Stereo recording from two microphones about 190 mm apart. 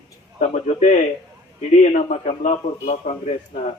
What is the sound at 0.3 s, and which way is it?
A man's voice, 40° left (ahead or behind).